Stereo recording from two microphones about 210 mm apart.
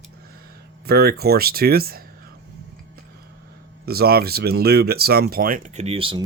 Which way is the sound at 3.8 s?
45° right (ahead or behind).